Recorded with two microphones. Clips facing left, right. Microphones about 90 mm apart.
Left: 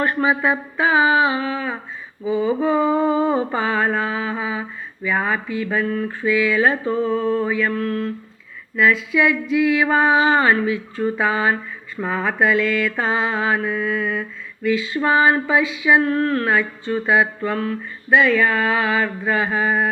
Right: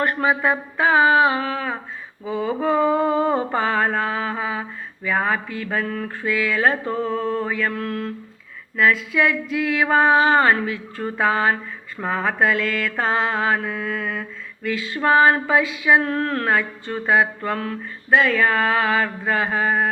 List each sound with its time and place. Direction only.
0.0 s mantra: 55° right (ahead or behind)
5.0 s speech: 55° right (ahead or behind)
6.2 s mantra: 55° right (ahead or behind)
8.7 s mantra: 50° right (ahead or behind)